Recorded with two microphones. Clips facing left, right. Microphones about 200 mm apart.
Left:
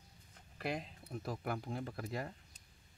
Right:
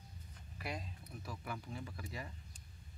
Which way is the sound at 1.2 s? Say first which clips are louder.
Left 6 dB; 55° left (ahead or behind).